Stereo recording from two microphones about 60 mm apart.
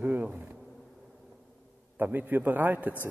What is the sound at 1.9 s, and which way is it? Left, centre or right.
Speech, right.